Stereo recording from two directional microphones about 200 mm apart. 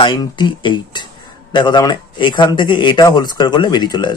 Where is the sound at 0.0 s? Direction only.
20° left (ahead or behind).